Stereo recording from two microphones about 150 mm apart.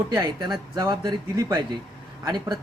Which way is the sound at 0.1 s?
30° right (ahead or behind).